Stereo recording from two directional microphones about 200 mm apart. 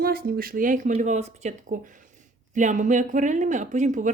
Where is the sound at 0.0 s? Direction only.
50° right (ahead or behind).